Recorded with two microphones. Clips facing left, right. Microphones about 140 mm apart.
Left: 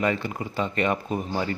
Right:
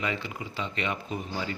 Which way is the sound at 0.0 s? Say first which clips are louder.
Left 7 dB; 50° left (ahead or behind).